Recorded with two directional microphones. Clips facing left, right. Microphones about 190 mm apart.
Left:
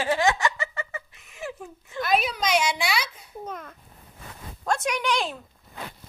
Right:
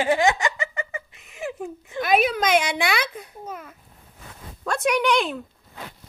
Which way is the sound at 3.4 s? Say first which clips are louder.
Left 1 dB; 10° right (ahead or behind).